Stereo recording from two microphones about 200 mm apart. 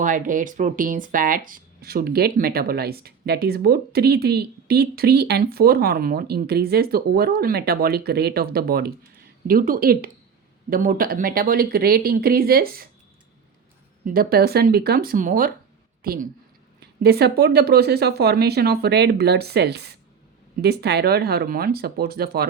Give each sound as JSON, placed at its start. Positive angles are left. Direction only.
{"t": 0.0, "sound": "speech", "side_deg": -40}
{"t": 14.0, "sound": "speech", "side_deg": -45}